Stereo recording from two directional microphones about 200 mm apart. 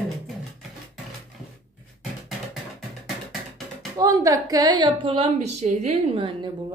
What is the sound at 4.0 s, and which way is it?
A woman's voice, 15° right (ahead or behind).